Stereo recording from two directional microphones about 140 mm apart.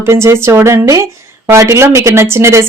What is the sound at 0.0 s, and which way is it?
A woman's voice, 20° right (ahead or behind).